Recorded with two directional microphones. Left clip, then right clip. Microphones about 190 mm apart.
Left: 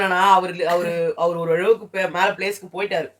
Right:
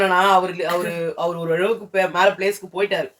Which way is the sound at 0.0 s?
20° left (ahead or behind).